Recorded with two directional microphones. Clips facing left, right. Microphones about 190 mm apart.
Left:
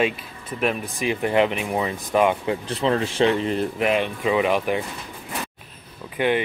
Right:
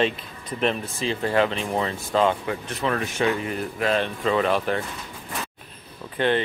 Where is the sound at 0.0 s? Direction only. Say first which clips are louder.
Left 1 dB; 5° left (ahead or behind); by 3.8 s 30° left (ahead or behind).